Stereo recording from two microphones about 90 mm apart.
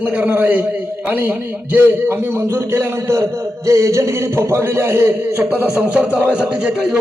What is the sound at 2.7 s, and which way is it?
A man's voice, 30° right (ahead or behind).